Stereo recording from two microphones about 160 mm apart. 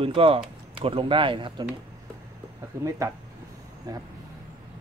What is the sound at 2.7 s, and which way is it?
Speech, 15° right (ahead or behind).